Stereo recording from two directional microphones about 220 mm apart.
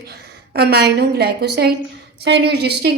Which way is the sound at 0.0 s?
45° right (ahead or behind).